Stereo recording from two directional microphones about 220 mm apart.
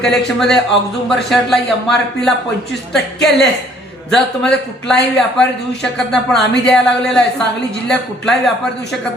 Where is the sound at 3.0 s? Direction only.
50° left (ahead or behind).